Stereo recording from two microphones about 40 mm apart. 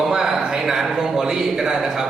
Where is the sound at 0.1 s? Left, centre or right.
Centre.